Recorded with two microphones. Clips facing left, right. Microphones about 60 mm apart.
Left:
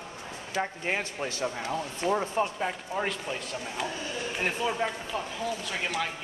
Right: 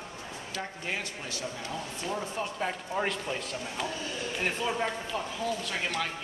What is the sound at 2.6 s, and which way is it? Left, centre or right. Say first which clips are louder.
Speech: even; centre.